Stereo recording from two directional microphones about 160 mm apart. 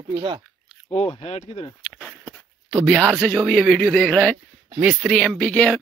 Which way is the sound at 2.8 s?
5° right (ahead or behind).